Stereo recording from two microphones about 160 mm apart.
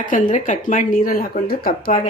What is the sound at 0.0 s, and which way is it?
Speech, 55° left (ahead or behind).